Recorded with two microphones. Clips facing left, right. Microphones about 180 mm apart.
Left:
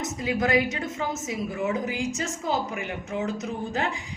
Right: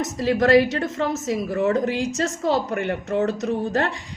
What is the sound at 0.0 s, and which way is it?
A woman's voice, 70° right (ahead or behind).